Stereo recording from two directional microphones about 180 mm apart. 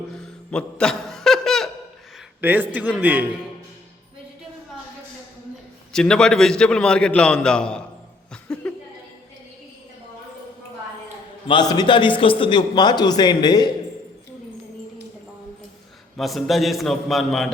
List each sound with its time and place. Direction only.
0.5 s chuckle: 5° left (ahead or behind)
2.4 s a man's voice: 10° right (ahead or behind)
5.9 s a man's voice: 5° left (ahead or behind)
8.3 s music: 5° left (ahead or behind)
11.4 s a man's voice: 25° left (ahead or behind)
16.1 s a man's voice: centre (ahead or behind)